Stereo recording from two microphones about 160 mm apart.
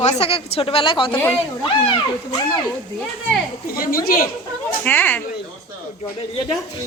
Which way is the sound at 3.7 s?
65° left (ahead or behind).